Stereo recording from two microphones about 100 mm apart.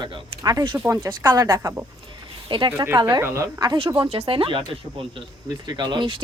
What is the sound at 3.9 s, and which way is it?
Speech, 55° right (ahead or behind).